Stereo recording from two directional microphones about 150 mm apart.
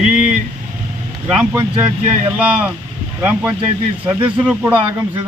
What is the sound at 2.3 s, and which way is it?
A man's voice, 10° right (ahead or behind).